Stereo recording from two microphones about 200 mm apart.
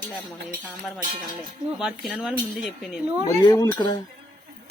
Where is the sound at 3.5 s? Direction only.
20° left (ahead or behind).